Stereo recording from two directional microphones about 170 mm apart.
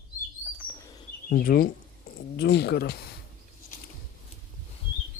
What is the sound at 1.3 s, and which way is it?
Speech, 60° left (ahead or behind).